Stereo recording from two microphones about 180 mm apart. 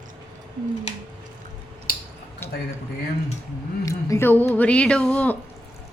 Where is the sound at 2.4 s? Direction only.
15° left (ahead or behind).